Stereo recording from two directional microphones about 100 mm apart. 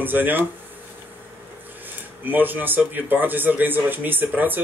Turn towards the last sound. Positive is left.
turn(degrees=-20)  # may be behind; listen again after turning